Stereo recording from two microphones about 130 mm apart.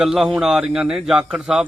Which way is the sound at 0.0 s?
5° right (ahead or behind).